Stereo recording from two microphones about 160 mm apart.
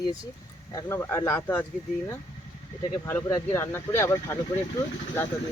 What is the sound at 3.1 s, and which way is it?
Speech, 15° left (ahead or behind).